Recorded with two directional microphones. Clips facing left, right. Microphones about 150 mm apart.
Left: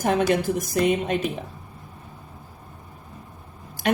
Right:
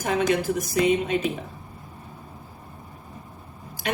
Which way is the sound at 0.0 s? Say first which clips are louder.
Left 2 dB; 50° left (ahead or behind).